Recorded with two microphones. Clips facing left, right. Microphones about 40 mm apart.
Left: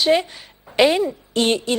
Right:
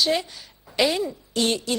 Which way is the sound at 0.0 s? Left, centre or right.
Left.